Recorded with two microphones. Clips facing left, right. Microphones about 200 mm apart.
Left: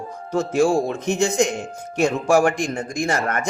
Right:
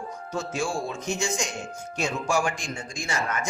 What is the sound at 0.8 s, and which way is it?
A man's voice, 60° left (ahead or behind).